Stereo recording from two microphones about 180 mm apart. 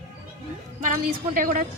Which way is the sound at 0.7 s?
50° right (ahead or behind).